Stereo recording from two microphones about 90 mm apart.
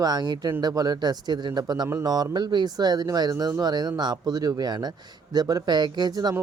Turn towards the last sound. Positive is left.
turn(degrees=-50)  # may be behind; listen again after turning